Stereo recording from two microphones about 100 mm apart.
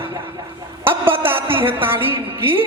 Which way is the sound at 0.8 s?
20° right (ahead or behind).